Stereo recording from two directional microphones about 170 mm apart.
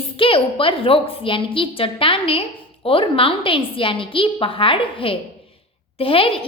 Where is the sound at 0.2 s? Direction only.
30° left (ahead or behind).